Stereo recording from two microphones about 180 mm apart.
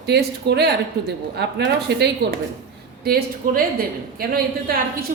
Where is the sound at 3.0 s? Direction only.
55° right (ahead or behind).